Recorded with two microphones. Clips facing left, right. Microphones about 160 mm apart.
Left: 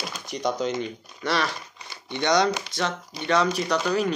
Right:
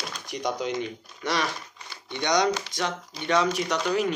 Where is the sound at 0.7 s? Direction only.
Centre (ahead or behind).